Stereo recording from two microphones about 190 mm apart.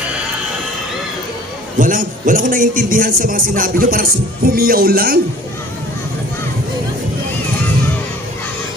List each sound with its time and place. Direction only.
1.8 s a man's voice: 45° right (ahead or behind)